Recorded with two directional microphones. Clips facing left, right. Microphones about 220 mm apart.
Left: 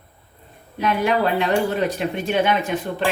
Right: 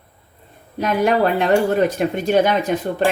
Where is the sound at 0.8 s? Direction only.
45° right (ahead or behind).